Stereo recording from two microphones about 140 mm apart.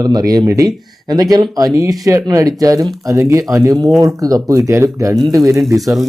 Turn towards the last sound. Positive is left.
turn(degrees=0)  # may be behind; listen again after turning